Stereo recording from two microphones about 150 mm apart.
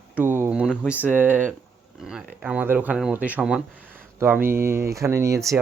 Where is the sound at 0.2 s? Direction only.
15° right (ahead or behind).